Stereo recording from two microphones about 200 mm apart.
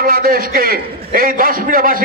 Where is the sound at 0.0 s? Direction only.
50° right (ahead or behind).